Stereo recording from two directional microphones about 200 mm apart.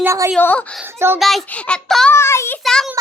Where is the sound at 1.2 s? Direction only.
Centre (ahead or behind).